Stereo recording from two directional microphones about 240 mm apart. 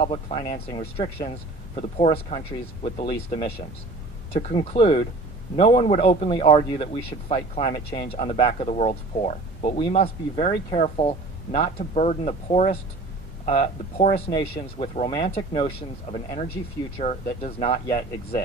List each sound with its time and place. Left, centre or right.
0.0 s speech: left